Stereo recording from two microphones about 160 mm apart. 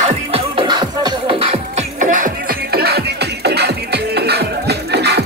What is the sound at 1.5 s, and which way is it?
Music, 55° right (ahead or behind).